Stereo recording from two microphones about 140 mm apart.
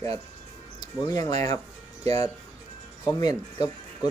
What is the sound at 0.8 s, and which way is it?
Speech, 30° left (ahead or behind).